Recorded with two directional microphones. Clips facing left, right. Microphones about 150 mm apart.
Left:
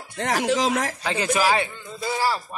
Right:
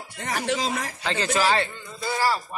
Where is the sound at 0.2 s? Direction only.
90° left.